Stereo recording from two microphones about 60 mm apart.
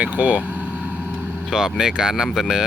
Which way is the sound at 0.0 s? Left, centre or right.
Right.